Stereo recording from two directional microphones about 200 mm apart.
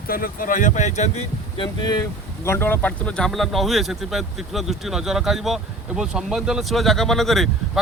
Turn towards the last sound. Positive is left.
turn(degrees=0)  # may be behind; listen again after turning